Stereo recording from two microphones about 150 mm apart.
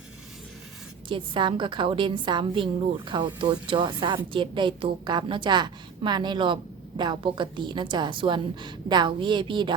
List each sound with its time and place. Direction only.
1.0 s a woman's voice: 35° right (ahead or behind)